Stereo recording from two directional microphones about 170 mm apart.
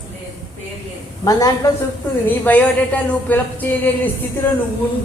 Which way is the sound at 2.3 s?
10° left (ahead or behind).